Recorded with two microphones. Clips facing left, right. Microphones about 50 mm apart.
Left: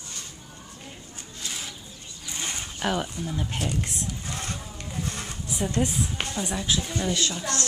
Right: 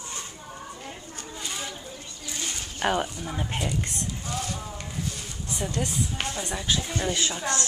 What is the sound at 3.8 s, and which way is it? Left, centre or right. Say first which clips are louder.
Speech: left 1 dB; centre.